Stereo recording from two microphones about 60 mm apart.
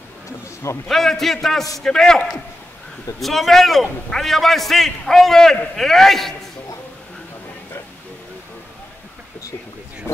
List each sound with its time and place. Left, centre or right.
0.8 s a man's voice: centre
10.1 s speech: left